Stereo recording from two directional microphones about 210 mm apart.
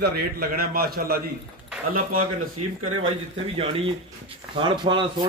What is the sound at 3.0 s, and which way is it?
Speech, 25° right (ahead or behind).